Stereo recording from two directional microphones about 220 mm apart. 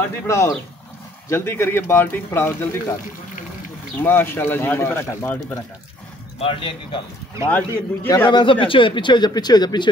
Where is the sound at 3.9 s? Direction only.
10° left (ahead or behind).